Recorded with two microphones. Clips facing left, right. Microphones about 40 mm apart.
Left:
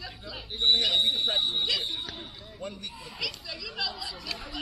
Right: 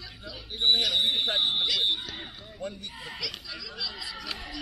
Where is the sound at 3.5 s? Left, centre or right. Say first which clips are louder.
Left 2 dB; centre.